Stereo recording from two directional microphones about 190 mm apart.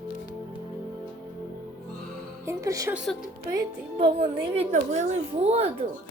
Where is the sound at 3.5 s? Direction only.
25° right (ahead or behind).